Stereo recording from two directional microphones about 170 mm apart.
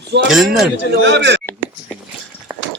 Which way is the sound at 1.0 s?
90° right.